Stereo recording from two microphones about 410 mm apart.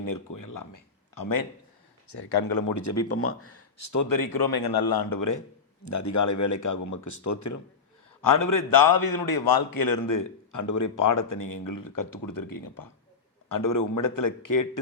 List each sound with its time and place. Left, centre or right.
0.0 s speech: left
2.0 s a man's voice: left